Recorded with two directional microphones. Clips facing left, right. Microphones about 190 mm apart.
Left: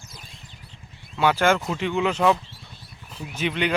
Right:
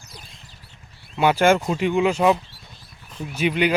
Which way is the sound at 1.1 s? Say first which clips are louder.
Right 3 dB; 15° right (ahead or behind).